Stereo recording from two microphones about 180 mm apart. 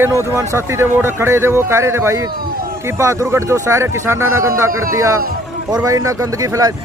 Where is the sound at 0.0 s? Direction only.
15° right (ahead or behind).